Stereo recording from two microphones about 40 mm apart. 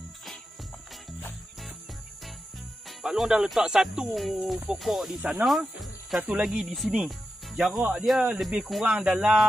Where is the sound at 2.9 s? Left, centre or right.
Centre.